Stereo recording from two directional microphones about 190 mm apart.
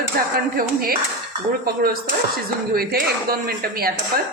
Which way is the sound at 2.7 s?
50° right (ahead or behind).